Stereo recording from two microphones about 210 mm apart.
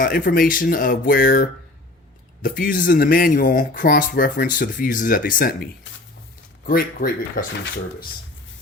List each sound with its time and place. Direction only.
0.0 s speech: 40° left (ahead or behind)
6.7 s speech: 40° left (ahead or behind)